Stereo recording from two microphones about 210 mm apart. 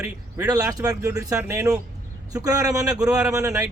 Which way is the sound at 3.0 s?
5° right (ahead or behind).